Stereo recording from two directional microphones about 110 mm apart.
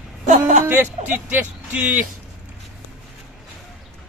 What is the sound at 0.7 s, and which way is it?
Speech, 20° right (ahead or behind).